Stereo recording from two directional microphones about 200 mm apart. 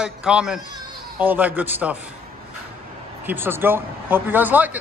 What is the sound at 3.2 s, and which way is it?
Speech, 10° right (ahead or behind).